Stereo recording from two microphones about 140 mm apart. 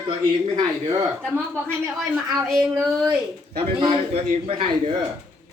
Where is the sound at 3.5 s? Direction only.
40° right (ahead or behind).